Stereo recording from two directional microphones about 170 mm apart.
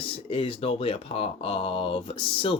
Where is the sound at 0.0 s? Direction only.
35° left (ahead or behind).